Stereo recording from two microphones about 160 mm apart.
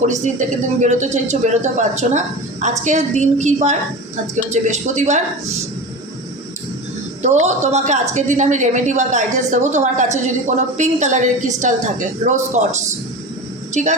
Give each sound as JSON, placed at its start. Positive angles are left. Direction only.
{"t": 0.0, "sound": "a woman's voice", "side_deg": -50}
{"t": 7.2, "sound": "a woman's voice", "side_deg": -45}